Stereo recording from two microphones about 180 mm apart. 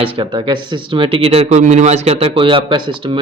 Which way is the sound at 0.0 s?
30° right (ahead or behind).